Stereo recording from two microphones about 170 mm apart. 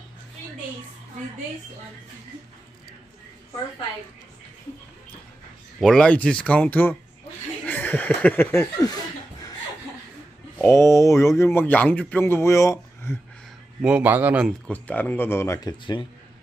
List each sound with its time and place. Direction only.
5.8 s speech: 5° left (ahead or behind)
7.6 s a sound: 10° left (ahead or behind)
10.6 s speech: 15° left (ahead or behind)
13.7 s a man's voice: 10° right (ahead or behind)
14.7 s speech: 10° left (ahead or behind)
15.8 s speech: 30° left (ahead or behind)